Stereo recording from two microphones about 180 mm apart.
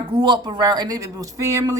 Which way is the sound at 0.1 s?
25° right (ahead or behind).